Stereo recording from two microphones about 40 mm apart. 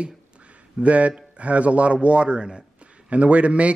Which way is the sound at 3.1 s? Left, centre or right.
Right.